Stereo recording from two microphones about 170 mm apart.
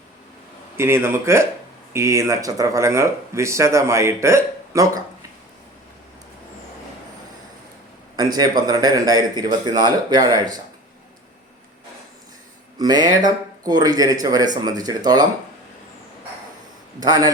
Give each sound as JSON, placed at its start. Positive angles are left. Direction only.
{"t": 0.8, "sound": "speech", "side_deg": -15}
{"t": 8.1, "sound": "a man's voice", "side_deg": -20}
{"t": 12.8, "sound": "a man's voice", "side_deg": -20}
{"t": 17.0, "sound": "a man's voice", "side_deg": -20}